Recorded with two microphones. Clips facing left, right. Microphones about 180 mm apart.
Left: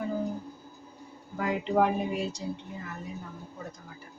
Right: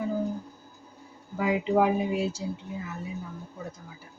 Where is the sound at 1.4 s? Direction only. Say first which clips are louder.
Right 2 dB; 5° right (ahead or behind).